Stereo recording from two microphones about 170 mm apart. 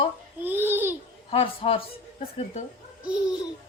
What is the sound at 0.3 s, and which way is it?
Babbling, 10° right (ahead or behind).